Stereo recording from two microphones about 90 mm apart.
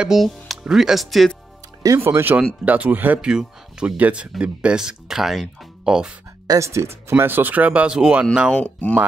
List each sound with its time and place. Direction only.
0.0 s speech: centre (ahead or behind)
2.0 s speech: 25° right (ahead or behind); by 6.1 s 10° right (ahead or behind)
6.4 s speech: 40° right (ahead or behind); by 8.3 s 10° right (ahead or behind)
8.5 s speech: 15° left (ahead or behind)